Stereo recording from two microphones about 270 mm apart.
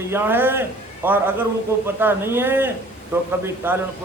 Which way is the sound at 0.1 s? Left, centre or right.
Centre.